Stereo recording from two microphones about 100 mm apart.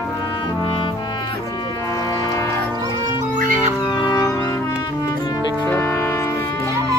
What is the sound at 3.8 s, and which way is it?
Music, 40° left (ahead or behind).